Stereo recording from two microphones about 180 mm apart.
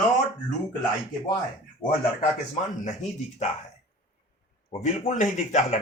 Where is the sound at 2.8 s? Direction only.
40° left (ahead or behind).